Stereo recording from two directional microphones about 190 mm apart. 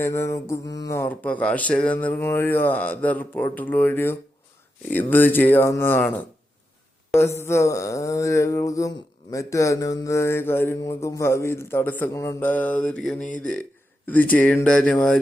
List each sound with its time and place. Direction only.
0.0 s speech: 15° left (ahead or behind)